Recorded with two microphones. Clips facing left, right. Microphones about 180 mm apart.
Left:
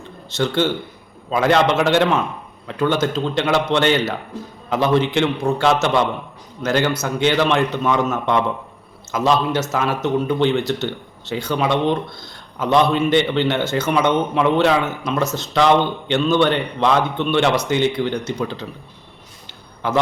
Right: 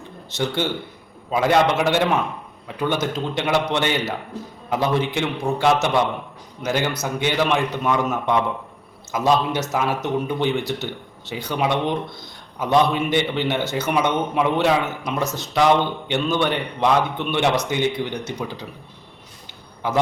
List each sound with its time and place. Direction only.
0.3 s a man's voice: 15° right (ahead or behind)
5.2 s a man's voice: 15° right (ahead or behind)